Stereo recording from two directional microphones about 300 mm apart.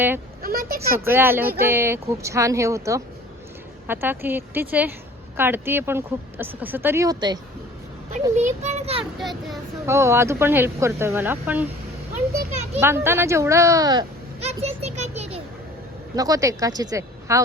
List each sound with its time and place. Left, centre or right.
0.4 s a sound: right
0.9 s speech: centre
8.4 s a child's voice: right
9.2 s speech: centre
12.8 s speech: centre
14.4 s a sound: right
16.1 s speech: centre